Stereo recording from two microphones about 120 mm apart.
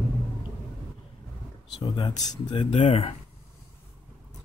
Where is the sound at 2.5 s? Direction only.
50° left (ahead or behind).